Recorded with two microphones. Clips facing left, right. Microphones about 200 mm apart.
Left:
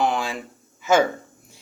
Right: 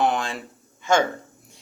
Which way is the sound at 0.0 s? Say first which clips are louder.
Even; centre (ahead or behind).